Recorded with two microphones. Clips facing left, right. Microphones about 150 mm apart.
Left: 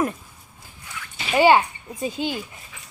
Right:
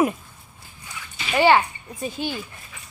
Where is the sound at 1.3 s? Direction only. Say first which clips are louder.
Left 1 dB; 15° left (ahead or behind).